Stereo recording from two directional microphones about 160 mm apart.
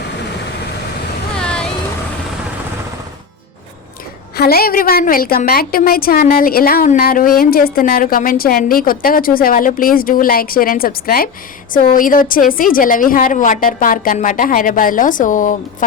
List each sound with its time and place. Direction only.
1.4 s vehicle: 5° left (ahead or behind)
4.4 s a woman's voice: 70° left (ahead or behind); by 15.5 s 55° left (ahead or behind)